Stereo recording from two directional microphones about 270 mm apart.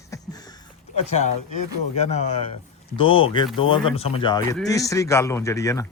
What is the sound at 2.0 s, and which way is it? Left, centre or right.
A man's voice, left.